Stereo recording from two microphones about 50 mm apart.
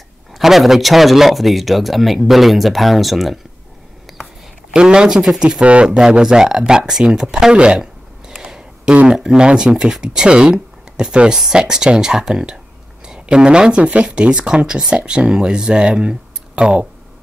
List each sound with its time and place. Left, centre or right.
0.3 s speech: centre
4.7 s speech: centre
7.8 s a sound: centre
9.0 s speech: centre